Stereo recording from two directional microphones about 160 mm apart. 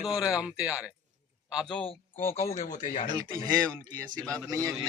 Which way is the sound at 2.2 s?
20° left (ahead or behind).